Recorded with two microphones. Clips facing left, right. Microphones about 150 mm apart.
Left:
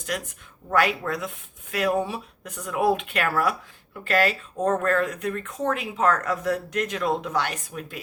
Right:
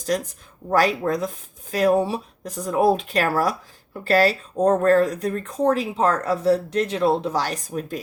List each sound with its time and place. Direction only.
0.0 s speech: 35° right (ahead or behind)